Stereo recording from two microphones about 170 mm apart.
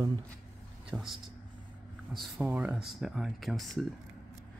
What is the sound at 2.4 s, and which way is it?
Speech, 10° right (ahead or behind).